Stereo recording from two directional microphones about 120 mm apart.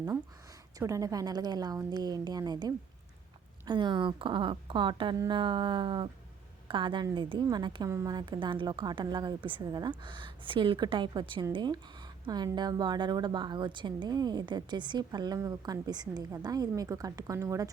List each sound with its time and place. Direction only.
0.8 s a woman's voice: 25° right (ahead or behind)
7.9 s a woman's voice: 25° right (ahead or behind)
8.1 s a woman's voice: 35° right (ahead or behind)